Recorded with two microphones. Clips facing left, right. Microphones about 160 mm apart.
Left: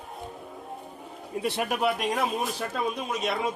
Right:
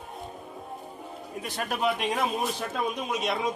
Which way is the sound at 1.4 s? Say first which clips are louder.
Left 6 dB; 30° left (ahead or behind).